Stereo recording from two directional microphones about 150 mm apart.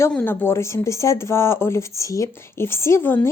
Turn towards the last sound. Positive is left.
turn(degrees=15)  # may be behind; listen again after turning